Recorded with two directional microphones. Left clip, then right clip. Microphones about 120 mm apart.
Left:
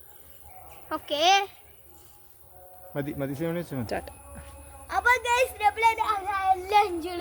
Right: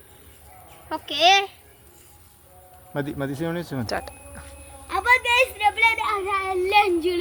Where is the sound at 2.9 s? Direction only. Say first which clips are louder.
Right 4 dB; 30° right (ahead or behind).